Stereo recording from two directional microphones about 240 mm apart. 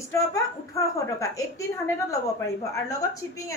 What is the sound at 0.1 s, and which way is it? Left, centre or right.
A woman's voice, centre.